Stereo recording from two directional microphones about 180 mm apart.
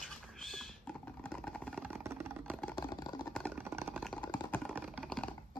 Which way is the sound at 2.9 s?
20° left (ahead or behind).